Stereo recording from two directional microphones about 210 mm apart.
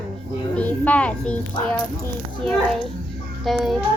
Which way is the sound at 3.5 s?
Centre (ahead or behind).